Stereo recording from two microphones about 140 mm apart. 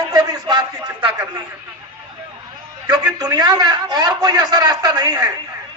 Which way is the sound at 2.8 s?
30° right (ahead or behind).